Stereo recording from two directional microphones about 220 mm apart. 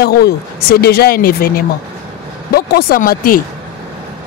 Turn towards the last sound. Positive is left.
turn(degrees=40)  # may be behind; listen again after turning